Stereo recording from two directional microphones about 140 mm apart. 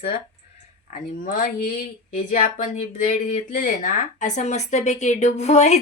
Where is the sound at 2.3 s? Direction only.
60° left (ahead or behind).